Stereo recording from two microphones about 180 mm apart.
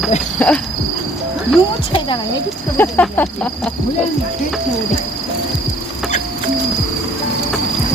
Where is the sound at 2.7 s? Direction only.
10° left (ahead or behind).